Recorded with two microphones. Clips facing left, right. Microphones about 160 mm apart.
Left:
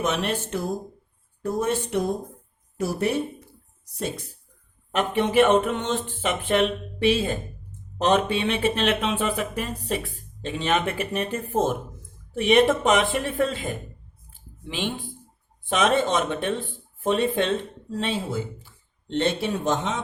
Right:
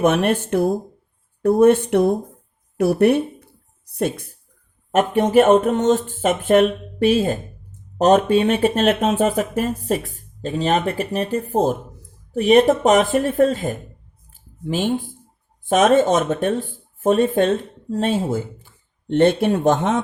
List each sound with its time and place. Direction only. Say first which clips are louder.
0.0 s speech: right 8 dB; 55° right (ahead or behind)